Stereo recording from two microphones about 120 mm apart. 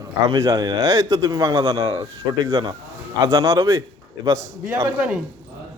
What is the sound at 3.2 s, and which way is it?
A man's voice, 35° right (ahead or behind).